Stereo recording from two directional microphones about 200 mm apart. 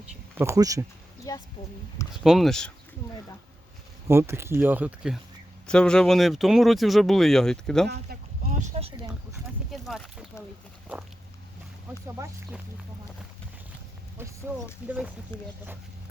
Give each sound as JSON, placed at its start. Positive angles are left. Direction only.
{"t": 0.3, "sound": "speech", "side_deg": -15}
{"t": 1.3, "sound": "a sound", "side_deg": 15}
{"t": 2.2, "sound": "speech", "side_deg": 0}
{"t": 4.1, "sound": "speech", "side_deg": -10}
{"t": 7.9, "sound": "a sound", "side_deg": -50}
{"t": 8.8, "sound": "a sound", "side_deg": -25}
{"t": 9.7, "sound": "speech", "side_deg": 0}
{"t": 12.0, "sound": "speech", "side_deg": -15}
{"t": 14.2, "sound": "speech", "side_deg": -10}
{"t": 15.3, "sound": "speech", "side_deg": 10}